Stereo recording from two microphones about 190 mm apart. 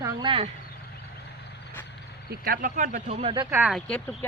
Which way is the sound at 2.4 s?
45° right (ahead or behind).